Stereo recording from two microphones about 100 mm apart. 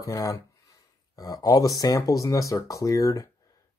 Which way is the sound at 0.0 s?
35° left (ahead or behind).